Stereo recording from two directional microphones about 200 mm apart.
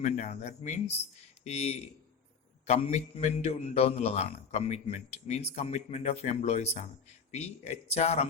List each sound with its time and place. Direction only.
0.0 s a man's voice: 35° left (ahead or behind)